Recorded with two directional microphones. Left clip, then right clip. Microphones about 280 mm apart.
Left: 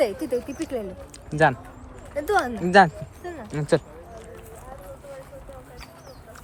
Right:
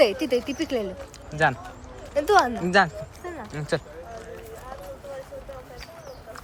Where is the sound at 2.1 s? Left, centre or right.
Centre.